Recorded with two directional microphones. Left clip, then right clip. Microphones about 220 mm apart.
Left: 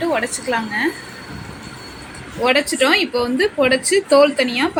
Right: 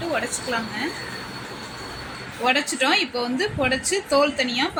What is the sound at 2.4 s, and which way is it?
A woman's voice, 5° left (ahead or behind).